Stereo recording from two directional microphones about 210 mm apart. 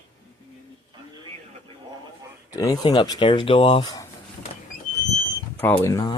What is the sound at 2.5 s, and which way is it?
Speech, 20° left (ahead or behind).